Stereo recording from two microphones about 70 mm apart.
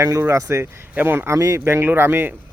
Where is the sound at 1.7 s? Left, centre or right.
Right.